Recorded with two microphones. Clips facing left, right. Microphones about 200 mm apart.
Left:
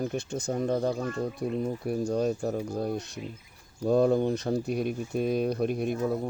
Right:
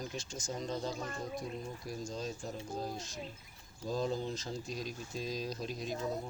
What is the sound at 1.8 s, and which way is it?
Speech, 65° left (ahead or behind).